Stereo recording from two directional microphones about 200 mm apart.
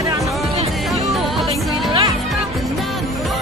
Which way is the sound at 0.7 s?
Centre (ahead or behind).